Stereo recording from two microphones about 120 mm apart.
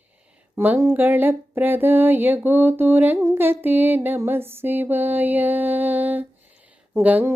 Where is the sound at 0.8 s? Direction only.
20° right (ahead or behind).